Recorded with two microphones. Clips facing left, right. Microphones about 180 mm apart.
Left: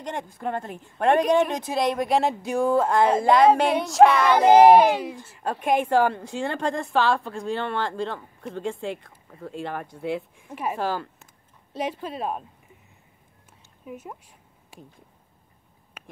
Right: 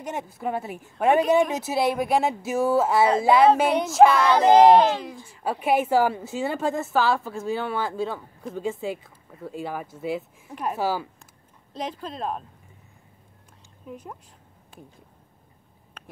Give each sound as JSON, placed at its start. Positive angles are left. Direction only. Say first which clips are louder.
{"t": 0.0, "sound": "a woman's voice", "louder": "right 1 dB", "side_deg": -5}
{"t": 5.4, "sound": "a woman's voice", "louder": "right 1 dB", "side_deg": -5}
{"t": 10.8, "sound": "speech", "louder": "right 3 dB", "side_deg": -5}
{"t": 11.7, "sound": "a child's voice", "louder": "left 3 dB", "side_deg": 10}
{"t": 13.8, "sound": "a woman's voice", "louder": "left 1 dB", "side_deg": 5}
{"t": 16.0, "sound": "a sound", "louder": "even", "side_deg": 10}